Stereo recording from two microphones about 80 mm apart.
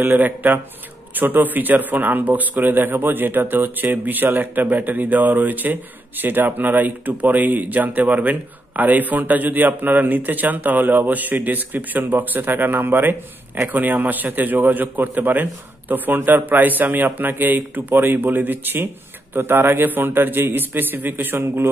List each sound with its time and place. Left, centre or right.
0.0 s a man's voice: right